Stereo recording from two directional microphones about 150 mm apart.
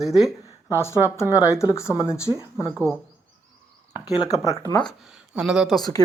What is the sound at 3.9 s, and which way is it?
Speech, 30° left (ahead or behind).